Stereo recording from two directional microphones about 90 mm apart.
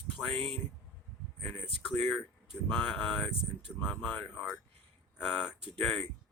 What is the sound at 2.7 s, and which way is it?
Speech, 15° left (ahead or behind).